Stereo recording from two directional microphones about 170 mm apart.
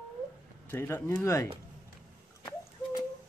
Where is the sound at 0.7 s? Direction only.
15° left (ahead or behind).